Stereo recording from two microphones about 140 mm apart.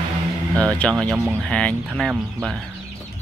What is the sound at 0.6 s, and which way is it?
Speech, 10° left (ahead or behind).